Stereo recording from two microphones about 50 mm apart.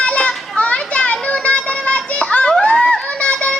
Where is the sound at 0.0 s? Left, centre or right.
Left.